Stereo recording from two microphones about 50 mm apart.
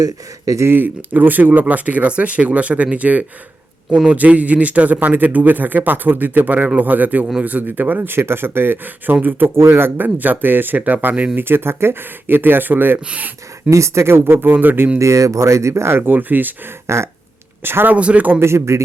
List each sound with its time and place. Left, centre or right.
0.4 s speech: right
0.7 s a man's voice: right
11.3 s speech: right
13.1 s a man's voice: right
13.7 s speech: right
14.2 s a man's voice: right
14.9 s speech: right
16.8 s a sound: right
17.6 s speech: right
17.9 s speech: right
18.3 s speech: right